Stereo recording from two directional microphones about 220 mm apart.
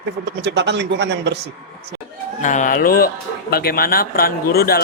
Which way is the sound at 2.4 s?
35° left (ahead or behind).